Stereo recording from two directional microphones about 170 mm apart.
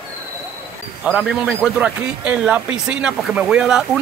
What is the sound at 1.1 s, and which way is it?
Speech, 5° right (ahead or behind).